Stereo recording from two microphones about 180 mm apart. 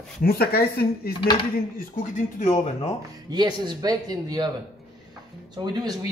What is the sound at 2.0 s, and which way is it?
Speech, 40° left (ahead or behind).